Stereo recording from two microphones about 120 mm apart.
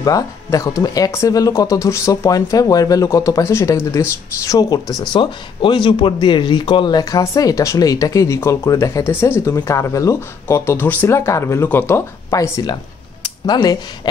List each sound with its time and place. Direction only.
0.0 s speech: 30° left (ahead or behind)
5.1 s speech: 40° left (ahead or behind)